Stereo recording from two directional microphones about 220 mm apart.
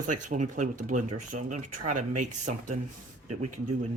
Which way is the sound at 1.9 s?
90° right.